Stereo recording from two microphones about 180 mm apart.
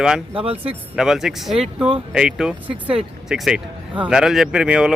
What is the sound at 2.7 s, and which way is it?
Speech, 30° right (ahead or behind).